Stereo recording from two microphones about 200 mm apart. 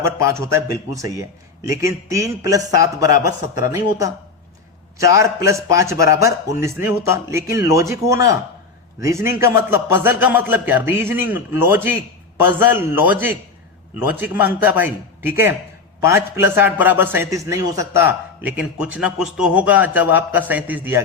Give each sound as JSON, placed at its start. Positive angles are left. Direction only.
{"t": 0.0, "sound": "a man's voice", "side_deg": -15}